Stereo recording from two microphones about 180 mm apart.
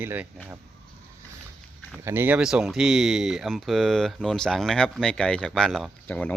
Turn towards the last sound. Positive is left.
turn(degrees=5)  # may be behind; listen again after turning